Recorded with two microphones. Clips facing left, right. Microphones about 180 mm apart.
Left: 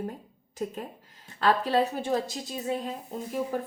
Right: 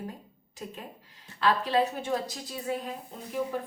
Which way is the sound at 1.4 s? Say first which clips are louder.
Left 2 dB; 45° left (ahead or behind).